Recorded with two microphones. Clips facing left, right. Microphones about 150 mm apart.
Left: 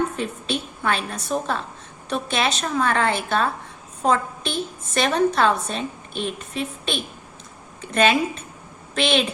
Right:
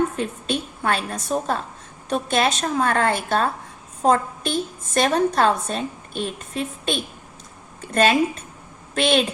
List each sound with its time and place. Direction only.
0.2 s a woman's voice: 45° right (ahead or behind)
9.0 s a woman's voice: 45° right (ahead or behind)